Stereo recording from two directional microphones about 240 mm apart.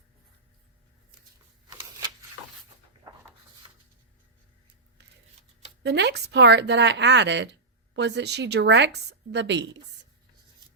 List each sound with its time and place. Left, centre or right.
5.8 s speech: right